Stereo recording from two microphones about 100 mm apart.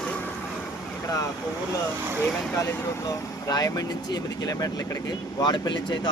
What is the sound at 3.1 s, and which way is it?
Speech, 40° left (ahead or behind).